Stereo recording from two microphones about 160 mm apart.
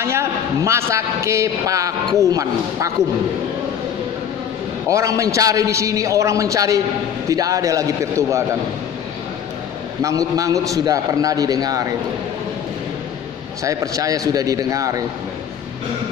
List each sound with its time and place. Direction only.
0.0 s a man's voice: 15° right (ahead or behind)
4.8 s a man's voice: 20° right (ahead or behind)
10.0 s a man's voice: 20° right (ahead or behind)
13.7 s a man's voice: 20° right (ahead or behind)